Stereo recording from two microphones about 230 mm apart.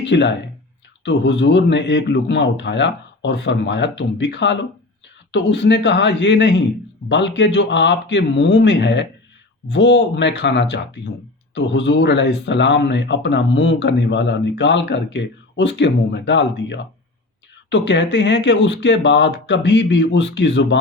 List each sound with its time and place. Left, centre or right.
0.0 s speech: left